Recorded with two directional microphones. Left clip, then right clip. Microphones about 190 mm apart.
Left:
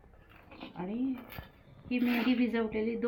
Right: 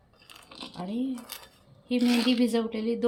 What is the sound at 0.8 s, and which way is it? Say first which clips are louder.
Speech: right 2 dB; 75° right (ahead or behind).